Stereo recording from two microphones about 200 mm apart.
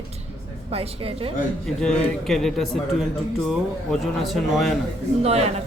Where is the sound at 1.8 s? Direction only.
Centre (ahead or behind).